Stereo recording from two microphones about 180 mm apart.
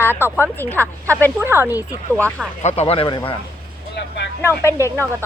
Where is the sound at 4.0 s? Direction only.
70° left (ahead or behind).